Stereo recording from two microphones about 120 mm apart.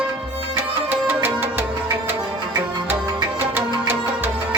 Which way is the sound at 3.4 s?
15° right (ahead or behind).